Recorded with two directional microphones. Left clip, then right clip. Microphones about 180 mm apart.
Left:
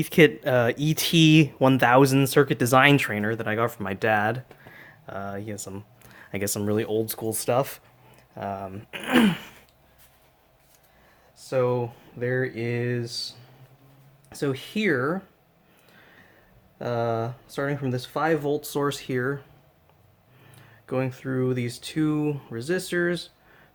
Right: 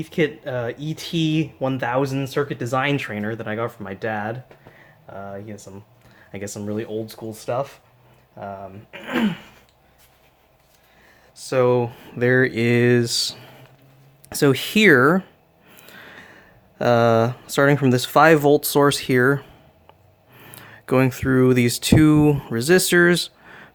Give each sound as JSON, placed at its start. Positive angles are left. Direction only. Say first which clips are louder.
{"t": 0.0, "sound": "speech", "louder": "left 4 dB", "side_deg": 40}
{"t": 11.3, "sound": "speech", "louder": "right 6 dB", "side_deg": -35}